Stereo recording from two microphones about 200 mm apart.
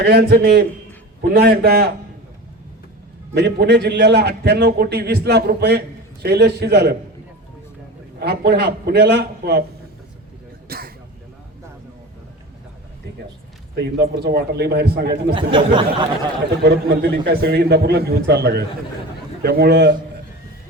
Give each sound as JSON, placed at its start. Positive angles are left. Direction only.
{"t": 0.0, "sound": "a man's voice", "side_deg": -55}
{"t": 3.3, "sound": "a man's voice", "side_deg": -55}
{"t": 8.2, "sound": "a man's voice", "side_deg": -55}
{"t": 10.7, "sound": "a sound", "side_deg": -50}
{"t": 13.7, "sound": "a man's voice", "side_deg": -55}
{"t": 15.3, "sound": "speech", "side_deg": -25}
{"t": 16.6, "sound": "a man's voice", "side_deg": -55}